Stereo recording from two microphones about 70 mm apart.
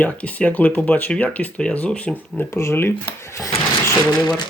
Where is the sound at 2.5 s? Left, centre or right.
Left.